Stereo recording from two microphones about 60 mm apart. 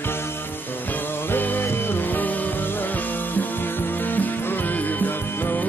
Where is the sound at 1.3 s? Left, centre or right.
Left.